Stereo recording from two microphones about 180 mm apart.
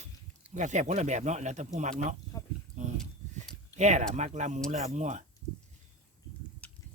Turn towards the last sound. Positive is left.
turn(degrees=10)  # may be behind; listen again after turning